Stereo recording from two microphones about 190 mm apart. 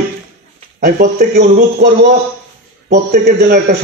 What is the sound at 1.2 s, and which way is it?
A man's voice, 55° right (ahead or behind).